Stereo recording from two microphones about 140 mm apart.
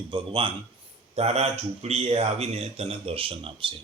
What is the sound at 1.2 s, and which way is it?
Speech, 50° right (ahead or behind).